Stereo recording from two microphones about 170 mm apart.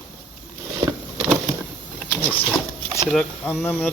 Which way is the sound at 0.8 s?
30° right (ahead or behind).